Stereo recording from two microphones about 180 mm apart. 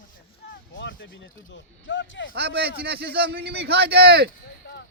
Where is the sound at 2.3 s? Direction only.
65° right (ahead or behind).